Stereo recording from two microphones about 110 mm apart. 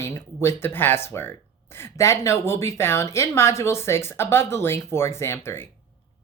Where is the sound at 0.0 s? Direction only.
25° left (ahead or behind).